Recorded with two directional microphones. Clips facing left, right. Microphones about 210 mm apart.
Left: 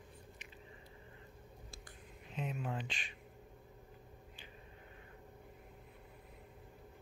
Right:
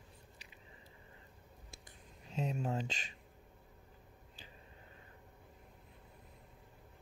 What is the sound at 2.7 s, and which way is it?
Speech, 40° right (ahead or behind).